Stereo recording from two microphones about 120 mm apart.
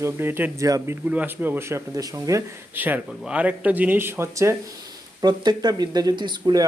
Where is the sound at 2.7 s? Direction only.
15° right (ahead or behind).